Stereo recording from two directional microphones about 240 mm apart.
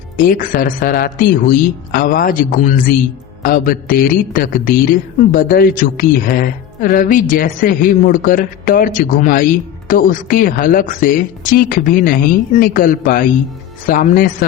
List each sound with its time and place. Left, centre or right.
0.2 s a man's voice: left